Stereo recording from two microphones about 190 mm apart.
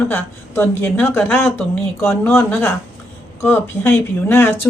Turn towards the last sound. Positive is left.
turn(degrees=10)  # may be behind; listen again after turning